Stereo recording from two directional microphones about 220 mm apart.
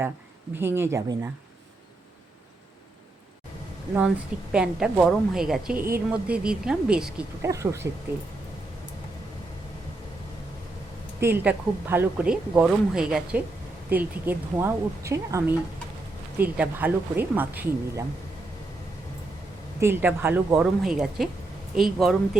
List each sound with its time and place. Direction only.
0.5 s speech: 10° right (ahead or behind)
4.5 s speech: 5° right (ahead or behind)
11.2 s speech: 10° right (ahead or behind)
19.8 s speech: 10° right (ahead or behind)